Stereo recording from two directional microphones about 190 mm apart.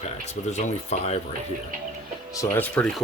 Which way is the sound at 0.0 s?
35° left (ahead or behind).